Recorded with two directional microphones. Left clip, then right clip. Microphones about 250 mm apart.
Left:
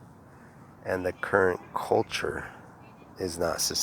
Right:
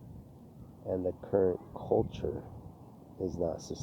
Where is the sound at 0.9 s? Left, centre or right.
Centre.